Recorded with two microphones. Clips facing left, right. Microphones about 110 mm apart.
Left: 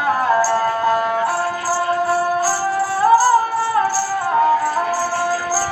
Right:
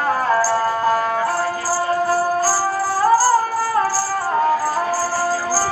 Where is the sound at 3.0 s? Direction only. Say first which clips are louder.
Left 2 dB; 20° left (ahead or behind).